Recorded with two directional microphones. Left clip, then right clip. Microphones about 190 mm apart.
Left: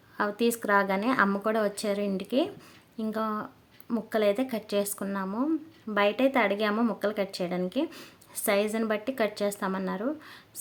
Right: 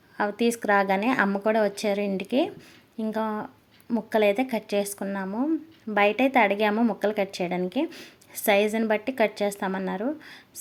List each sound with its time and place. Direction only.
0.2 s a woman's voice: centre (ahead or behind)